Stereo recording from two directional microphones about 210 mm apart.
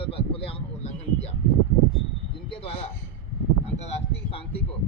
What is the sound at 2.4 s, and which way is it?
Speech, 25° left (ahead or behind).